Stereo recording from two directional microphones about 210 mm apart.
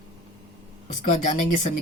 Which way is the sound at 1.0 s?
35° left (ahead or behind).